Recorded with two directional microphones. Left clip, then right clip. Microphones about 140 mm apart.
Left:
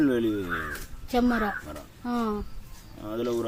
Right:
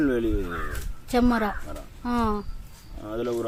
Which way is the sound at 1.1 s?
45° right (ahead or behind).